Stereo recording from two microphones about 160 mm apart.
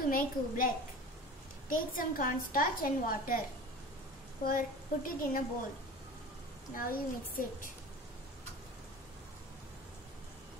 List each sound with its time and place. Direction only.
0.1 s a woman's voice: 60° left (ahead or behind)
4.5 s a woman's voice: 60° left (ahead or behind)
6.7 s a woman's voice: 60° left (ahead or behind)